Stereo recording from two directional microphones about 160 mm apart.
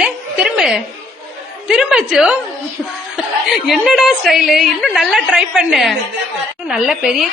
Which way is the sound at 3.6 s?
Centre (ahead or behind).